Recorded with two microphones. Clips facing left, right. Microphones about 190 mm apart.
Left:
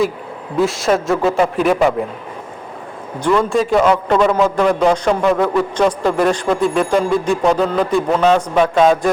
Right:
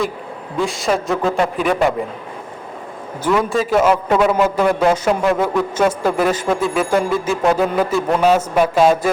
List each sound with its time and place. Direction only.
0.6 s a man's voice: centre (ahead or behind)
3.2 s a man's voice: 5° right (ahead or behind)